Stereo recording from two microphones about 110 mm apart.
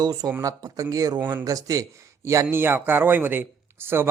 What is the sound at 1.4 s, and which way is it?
Speech, 35° right (ahead or behind).